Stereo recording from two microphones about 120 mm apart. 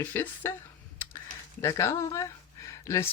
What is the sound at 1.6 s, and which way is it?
Speech, 25° left (ahead or behind).